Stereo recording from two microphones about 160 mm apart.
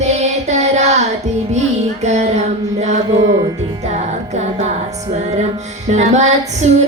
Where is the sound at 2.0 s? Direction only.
45° right (ahead or behind).